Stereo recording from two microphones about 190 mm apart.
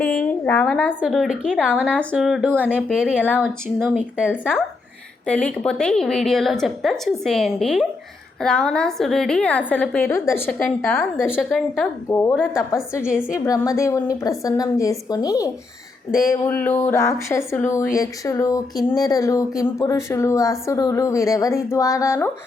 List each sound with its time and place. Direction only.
0.0 s a woman's voice: 5° left (ahead or behind)
5.2 s a woman's voice: 5° left (ahead or behind)
11.3 s a woman's voice: centre (ahead or behind)
12.0 s speech: 10° left (ahead or behind)
13.0 s a woman's voice: 5° right (ahead or behind)
13.4 s speech: 15° left (ahead or behind)